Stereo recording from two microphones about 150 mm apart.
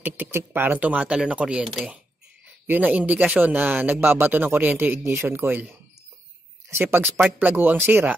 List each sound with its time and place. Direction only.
0.0 s speech: 15° right (ahead or behind)
2.6 s speech: 10° right (ahead or behind)